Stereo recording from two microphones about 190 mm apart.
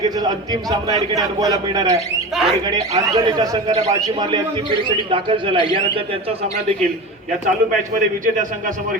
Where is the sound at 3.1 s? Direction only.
20° right (ahead or behind).